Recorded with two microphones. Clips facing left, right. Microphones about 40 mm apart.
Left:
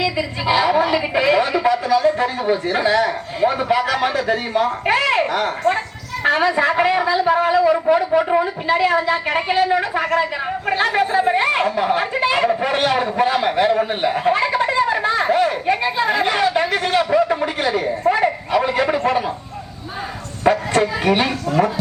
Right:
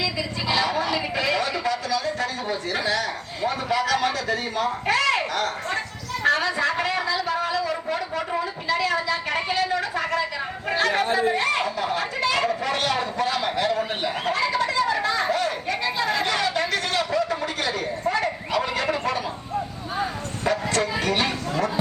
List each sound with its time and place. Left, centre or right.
0.0 s a man's voice: left
20.4 s a sound: left
21.0 s a man's voice: left